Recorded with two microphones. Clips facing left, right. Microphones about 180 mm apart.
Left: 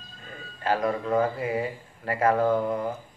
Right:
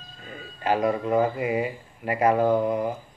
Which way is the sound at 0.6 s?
20° right (ahead or behind).